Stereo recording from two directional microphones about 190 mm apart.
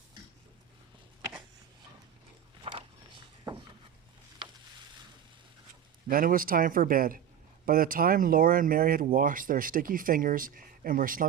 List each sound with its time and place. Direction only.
2.7 s walk: 30° right (ahead or behind)
6.1 s speech: 45° right (ahead or behind)